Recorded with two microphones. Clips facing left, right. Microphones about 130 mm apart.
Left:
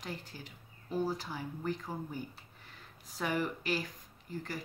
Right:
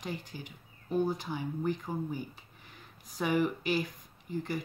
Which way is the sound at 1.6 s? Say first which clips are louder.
Right 3 dB; 10° right (ahead or behind).